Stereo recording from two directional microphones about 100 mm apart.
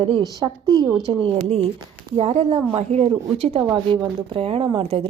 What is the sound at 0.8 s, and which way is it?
Speech, centre (ahead or behind).